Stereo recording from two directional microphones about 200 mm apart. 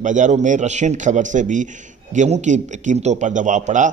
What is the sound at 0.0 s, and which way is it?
A man's voice, 40° right (ahead or behind).